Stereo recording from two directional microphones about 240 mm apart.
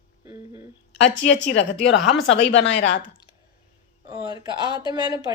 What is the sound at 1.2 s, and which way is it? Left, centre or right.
Speech, left.